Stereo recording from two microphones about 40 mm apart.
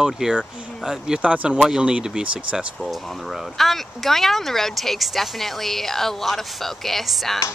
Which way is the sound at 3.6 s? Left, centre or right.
Centre.